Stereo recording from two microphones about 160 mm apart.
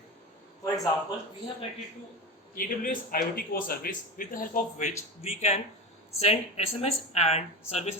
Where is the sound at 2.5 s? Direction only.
60° left (ahead or behind).